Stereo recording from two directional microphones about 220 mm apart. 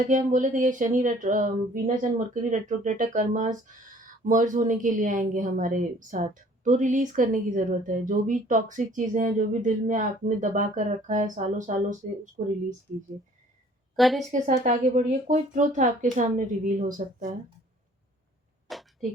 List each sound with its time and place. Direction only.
0.1 s speech: 35° right (ahead or behind)
13.9 s a woman's voice: centre (ahead or behind)
14.3 s speech: 35° right (ahead or behind)
18.7 s a sound: centre (ahead or behind)